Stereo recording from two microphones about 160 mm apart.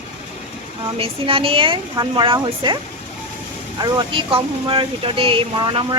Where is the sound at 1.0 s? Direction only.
35° right (ahead or behind).